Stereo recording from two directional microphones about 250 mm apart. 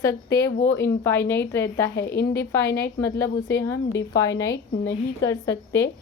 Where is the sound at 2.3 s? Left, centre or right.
Centre.